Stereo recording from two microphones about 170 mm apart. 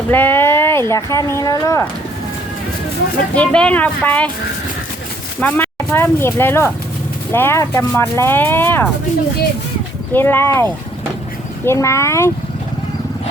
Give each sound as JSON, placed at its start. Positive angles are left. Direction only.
{"t": 0.1, "sound": "speech", "side_deg": 10}
{"t": 3.3, "sound": "speech", "side_deg": 5}
{"t": 5.4, "sound": "speech", "side_deg": 10}
{"t": 10.1, "sound": "speech", "side_deg": 10}